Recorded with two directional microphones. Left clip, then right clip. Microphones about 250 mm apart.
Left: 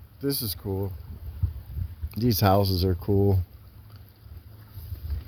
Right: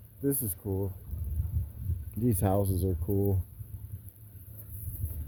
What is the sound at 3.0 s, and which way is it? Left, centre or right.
Speech, left.